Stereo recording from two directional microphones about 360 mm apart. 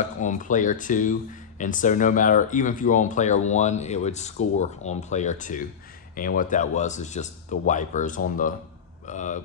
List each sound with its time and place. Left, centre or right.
0.0 s speech: left